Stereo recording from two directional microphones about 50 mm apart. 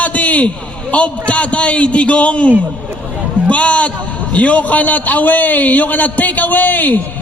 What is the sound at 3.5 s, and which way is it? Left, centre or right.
A man's voice, left.